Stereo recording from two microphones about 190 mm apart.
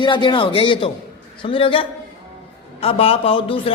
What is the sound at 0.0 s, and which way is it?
A man's voice, 25° left (ahead or behind).